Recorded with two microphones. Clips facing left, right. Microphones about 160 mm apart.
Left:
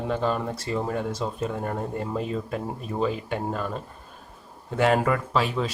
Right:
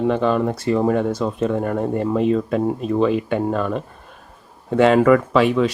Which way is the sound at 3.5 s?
70° right (ahead or behind).